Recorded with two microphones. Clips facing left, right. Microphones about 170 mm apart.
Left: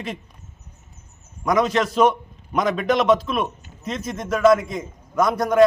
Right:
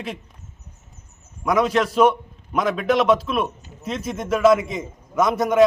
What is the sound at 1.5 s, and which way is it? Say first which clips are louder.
A man's voice: even; 5° right (ahead or behind).